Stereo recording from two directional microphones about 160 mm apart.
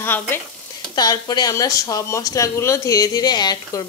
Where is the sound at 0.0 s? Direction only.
15° left (ahead or behind).